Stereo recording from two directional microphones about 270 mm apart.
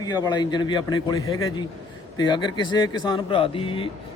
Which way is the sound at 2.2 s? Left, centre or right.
Centre.